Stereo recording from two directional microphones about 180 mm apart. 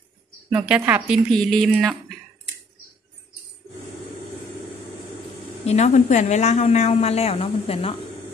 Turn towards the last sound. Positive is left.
turn(degrees=35)  # may be behind; listen again after turning